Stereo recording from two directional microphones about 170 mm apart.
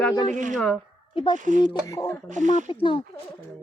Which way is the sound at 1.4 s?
50° right (ahead or behind).